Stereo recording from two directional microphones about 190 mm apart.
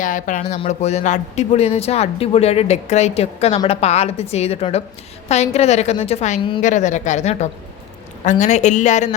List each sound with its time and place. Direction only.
0.0 s speech: 45° left (ahead or behind)